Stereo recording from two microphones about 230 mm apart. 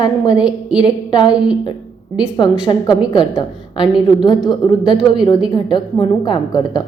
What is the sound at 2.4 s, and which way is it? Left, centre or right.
A woman's voice, centre.